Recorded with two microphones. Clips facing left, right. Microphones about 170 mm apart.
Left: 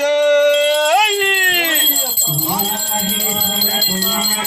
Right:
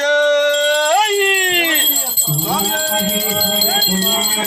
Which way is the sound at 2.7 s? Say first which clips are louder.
Right 4 dB; 75° right (ahead or behind).